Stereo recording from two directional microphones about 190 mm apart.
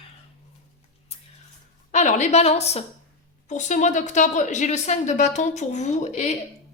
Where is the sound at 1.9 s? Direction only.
40° left (ahead or behind).